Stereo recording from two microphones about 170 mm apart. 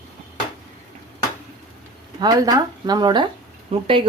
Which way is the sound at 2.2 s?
25° right (ahead or behind).